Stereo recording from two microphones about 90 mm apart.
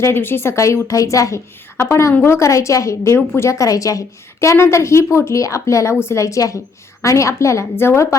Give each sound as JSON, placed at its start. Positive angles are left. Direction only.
{"t": 0.0, "sound": "a woman's voice", "side_deg": 25}